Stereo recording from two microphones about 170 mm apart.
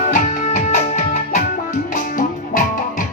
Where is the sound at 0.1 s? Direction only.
50° left (ahead or behind).